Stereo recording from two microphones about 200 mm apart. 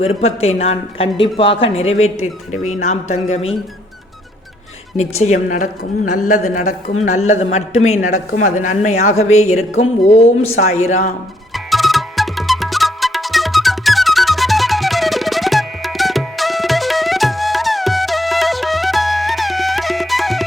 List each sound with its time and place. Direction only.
0.0 s speech: 30° left (ahead or behind)
5.2 s speech: 35° left (ahead or behind)
7.9 s speech: 90° left
8.5 s speech: 35° left (ahead or behind)
11.5 s music: centre (ahead or behind)